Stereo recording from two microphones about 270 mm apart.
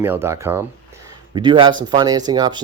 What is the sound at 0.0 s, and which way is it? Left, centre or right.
A man's voice, centre.